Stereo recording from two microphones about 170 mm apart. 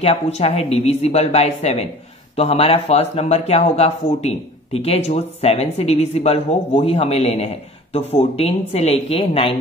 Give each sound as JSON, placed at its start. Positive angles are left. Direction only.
{"t": 0.0, "sound": "speech", "side_deg": 40}